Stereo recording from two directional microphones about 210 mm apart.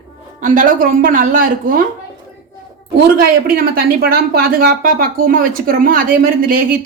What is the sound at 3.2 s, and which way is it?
Speech, 45° right (ahead or behind).